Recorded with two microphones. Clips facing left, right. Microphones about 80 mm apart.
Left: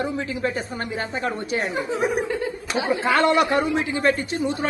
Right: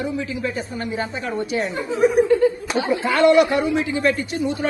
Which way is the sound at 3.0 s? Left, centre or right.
Left.